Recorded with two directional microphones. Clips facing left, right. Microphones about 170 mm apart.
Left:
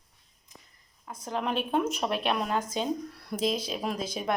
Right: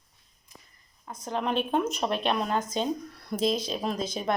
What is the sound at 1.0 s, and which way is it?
Speech, 5° left (ahead or behind).